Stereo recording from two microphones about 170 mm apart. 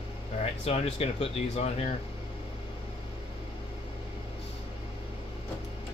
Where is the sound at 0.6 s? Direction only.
35° left (ahead or behind).